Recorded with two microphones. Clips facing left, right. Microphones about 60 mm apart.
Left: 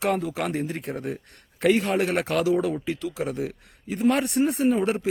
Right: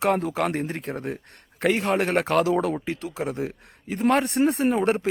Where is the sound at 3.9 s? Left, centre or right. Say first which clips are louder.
Right 1 dB; right.